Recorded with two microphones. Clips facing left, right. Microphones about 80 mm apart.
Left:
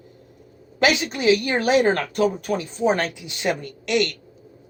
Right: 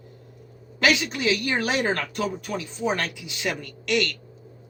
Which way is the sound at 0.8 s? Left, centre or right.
Left.